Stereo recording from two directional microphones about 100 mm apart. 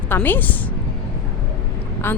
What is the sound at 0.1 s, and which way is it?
Speech, 20° left (ahead or behind).